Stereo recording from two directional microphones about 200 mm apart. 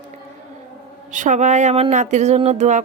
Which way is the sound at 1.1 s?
40° right (ahead or behind).